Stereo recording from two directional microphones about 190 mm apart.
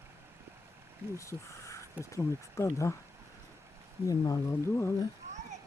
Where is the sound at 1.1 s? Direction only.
15° left (ahead or behind).